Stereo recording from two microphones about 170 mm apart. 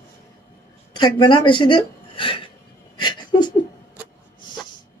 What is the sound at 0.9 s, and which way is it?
Speech, 25° left (ahead or behind).